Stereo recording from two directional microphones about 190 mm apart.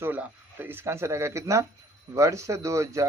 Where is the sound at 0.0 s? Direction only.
10° right (ahead or behind).